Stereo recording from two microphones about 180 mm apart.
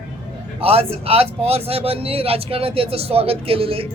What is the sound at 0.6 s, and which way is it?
Speech, 35° right (ahead or behind).